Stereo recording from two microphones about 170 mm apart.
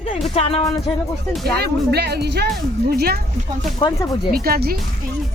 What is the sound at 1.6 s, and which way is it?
Speech, 75° right (ahead or behind).